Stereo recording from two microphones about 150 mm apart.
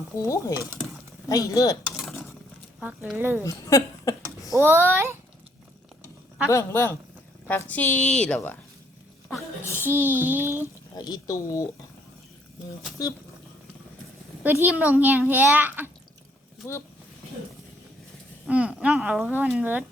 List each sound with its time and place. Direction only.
0.2 s speech: 20° left (ahead or behind)
3.2 s a child's voice: 15° right (ahead or behind)
3.4 s speech: 20° left (ahead or behind)
4.5 s a child's voice: 15° right (ahead or behind)
6.5 s a woman's voice: 20° left (ahead or behind)
9.6 s a child's voice: 15° right (ahead or behind)
10.9 s speech: 25° left (ahead or behind)
14.4 s a child's voice: 10° right (ahead or behind)
18.4 s a child's voice: 10° right (ahead or behind)